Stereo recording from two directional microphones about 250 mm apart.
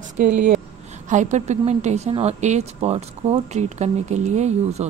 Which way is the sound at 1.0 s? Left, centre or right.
Right.